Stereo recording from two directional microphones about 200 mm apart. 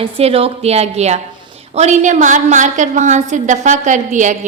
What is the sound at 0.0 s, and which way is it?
A woman's voice, 30° right (ahead or behind).